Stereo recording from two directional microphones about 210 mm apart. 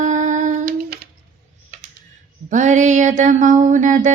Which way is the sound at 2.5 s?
35° right (ahead or behind).